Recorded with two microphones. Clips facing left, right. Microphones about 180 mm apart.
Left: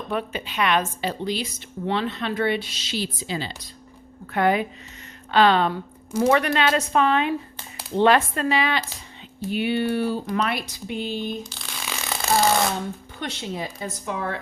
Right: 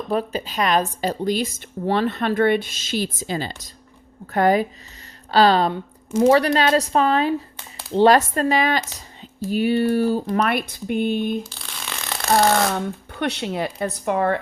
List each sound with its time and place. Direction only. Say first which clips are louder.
0.1 s a woman's voice: right 5 dB; 35° right (ahead or behind)
10.3 s speech: right 4 dB; 55° right (ahead or behind)
11.4 s a sound: left 1 dB; centre (ahead or behind)
12.7 s speech: right 4 dB; 65° right (ahead or behind)